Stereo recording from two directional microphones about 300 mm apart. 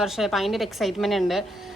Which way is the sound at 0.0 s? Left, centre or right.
Centre.